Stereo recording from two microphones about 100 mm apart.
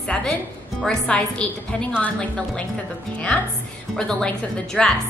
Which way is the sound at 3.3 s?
10° left (ahead or behind).